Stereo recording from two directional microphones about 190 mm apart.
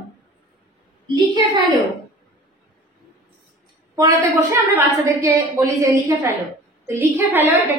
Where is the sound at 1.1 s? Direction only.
25° right (ahead or behind).